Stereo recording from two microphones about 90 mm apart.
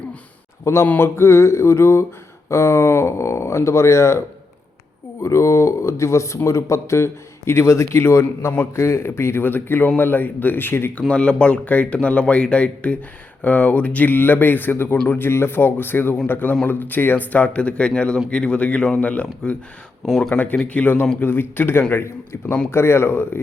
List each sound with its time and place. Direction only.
0.6 s speech: 30° left (ahead or behind)
5.2 s speech: 30° left (ahead or behind)
11.1 s speech: 10° left (ahead or behind)
20.1 s speech: 5° left (ahead or behind)
20.3 s speech: 20° left (ahead or behind)